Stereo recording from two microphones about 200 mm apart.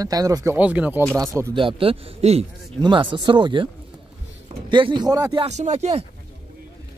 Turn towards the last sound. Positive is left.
turn(degrees=-30)  # may be behind; listen again after turning